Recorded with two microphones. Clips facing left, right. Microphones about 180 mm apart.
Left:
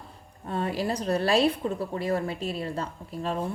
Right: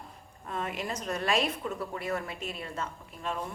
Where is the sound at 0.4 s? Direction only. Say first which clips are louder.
Left 6 dB; 35° left (ahead or behind).